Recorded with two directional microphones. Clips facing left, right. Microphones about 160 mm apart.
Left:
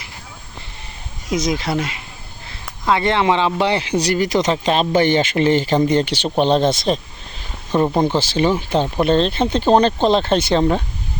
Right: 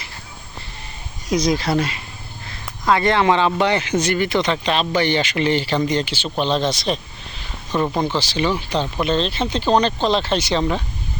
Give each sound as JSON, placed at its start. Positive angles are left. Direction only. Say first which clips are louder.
{"t": 1.3, "sound": "speech", "louder": "right 1 dB", "side_deg": 20}
{"t": 7.9, "sound": "speech", "louder": "left 4 dB", "side_deg": 25}
{"t": 8.1, "sound": "speech", "louder": "left 4 dB", "side_deg": 50}